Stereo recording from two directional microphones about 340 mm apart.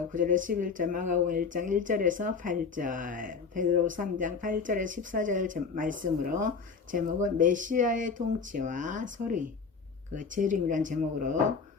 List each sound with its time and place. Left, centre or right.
0.1 s speech: right